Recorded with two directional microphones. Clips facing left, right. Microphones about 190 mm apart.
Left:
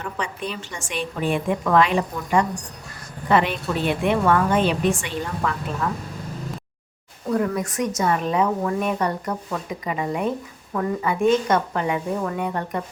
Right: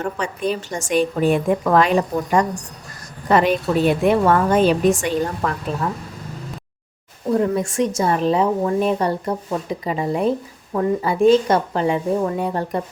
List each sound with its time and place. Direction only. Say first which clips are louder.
0.0 s a woman's voice: right 6 dB; 40° right (ahead or behind)
7.3 s a woman's voice: right 4 dB; 25° right (ahead or behind)